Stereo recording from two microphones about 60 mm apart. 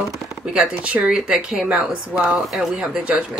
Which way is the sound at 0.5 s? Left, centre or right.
Centre.